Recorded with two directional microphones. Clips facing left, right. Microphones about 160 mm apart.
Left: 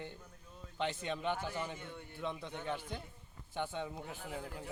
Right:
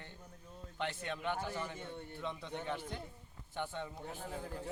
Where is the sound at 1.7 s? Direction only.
30° right (ahead or behind).